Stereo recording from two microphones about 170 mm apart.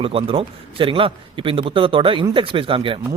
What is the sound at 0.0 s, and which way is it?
A man's voice, 35° right (ahead or behind).